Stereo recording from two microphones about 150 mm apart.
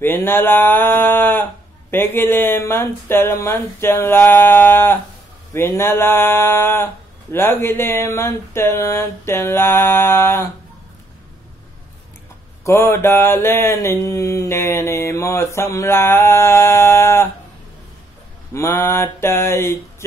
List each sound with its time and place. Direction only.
0.0 s mantra: 15° left (ahead or behind)
12.6 s mantra: 20° left (ahead or behind)
18.5 s mantra: 20° left (ahead or behind)